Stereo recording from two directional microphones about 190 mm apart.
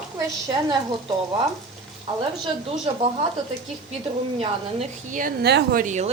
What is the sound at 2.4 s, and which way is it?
Speech, 30° right (ahead or behind).